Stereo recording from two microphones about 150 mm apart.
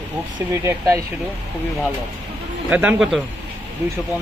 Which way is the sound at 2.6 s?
10° right (ahead or behind).